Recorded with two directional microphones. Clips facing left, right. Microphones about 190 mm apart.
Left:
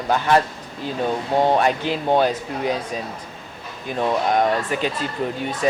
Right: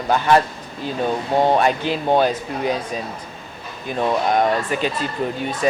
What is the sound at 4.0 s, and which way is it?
Speech, 20° right (ahead or behind).